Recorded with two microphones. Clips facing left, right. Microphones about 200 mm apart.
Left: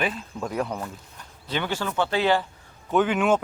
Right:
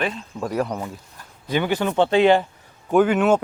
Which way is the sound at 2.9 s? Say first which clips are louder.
Right 5 dB; 5° right (ahead or behind).